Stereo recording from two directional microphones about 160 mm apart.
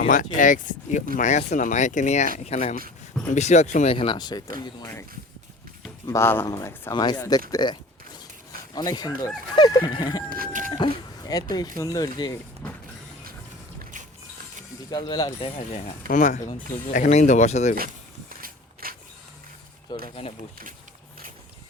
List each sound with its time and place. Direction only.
0.0 s speech: 55° left (ahead or behind)
3.9 s speech: 30° left (ahead or behind)
6.1 s speech: 15° left (ahead or behind)
10.2 s speech: 65° right (ahead or behind)
10.7 s a sound: 30° left (ahead or behind)
11.8 s speech: 20° left (ahead or behind)
12.6 s vehicle: 5° left (ahead or behind)
14.8 s speech: 25° left (ahead or behind)
16.0 s speech: 50° left (ahead or behind)
18.3 s a sound: 65° right (ahead or behind)
19.9 s speech: 25° left (ahead or behind)